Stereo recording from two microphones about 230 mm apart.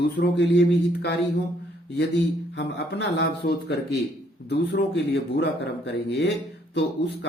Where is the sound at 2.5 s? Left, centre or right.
Left.